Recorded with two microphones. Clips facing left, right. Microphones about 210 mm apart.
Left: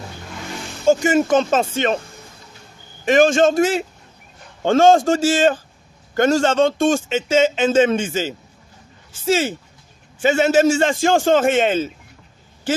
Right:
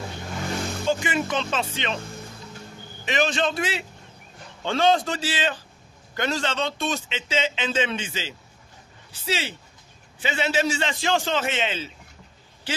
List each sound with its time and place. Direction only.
0.8 s speech: 45° left (ahead or behind)
3.1 s a man's voice: 45° left (ahead or behind)